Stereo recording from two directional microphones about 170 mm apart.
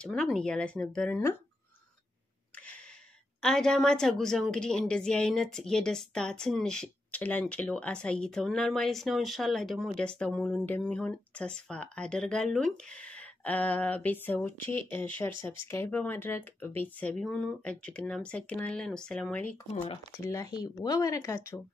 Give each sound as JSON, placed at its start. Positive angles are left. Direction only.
{"t": 0.0, "sound": "a woman's voice", "side_deg": 5}
{"t": 3.4, "sound": "a woman's voice", "side_deg": 5}
{"t": 20.2, "sound": "speech", "side_deg": 20}